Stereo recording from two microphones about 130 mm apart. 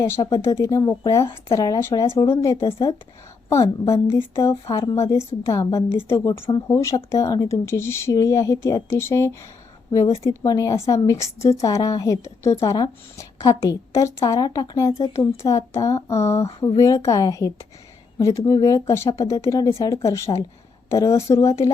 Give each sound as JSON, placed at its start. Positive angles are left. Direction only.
{"t": 0.0, "sound": "a woman's voice", "side_deg": 30}